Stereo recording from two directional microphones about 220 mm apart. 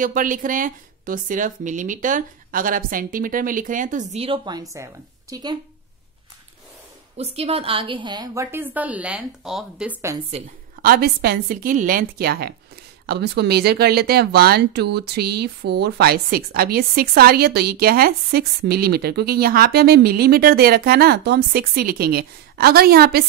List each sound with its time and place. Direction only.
0.0 s speech: 35° right (ahead or behind); by 5.6 s 20° right (ahead or behind)
7.3 s a woman's voice: 25° right (ahead or behind); by 10.1 s 5° right (ahead or behind)
10.8 s speech: 40° right (ahead or behind)